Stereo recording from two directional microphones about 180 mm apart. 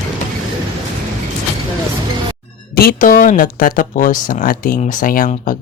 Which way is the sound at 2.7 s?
50° left (ahead or behind).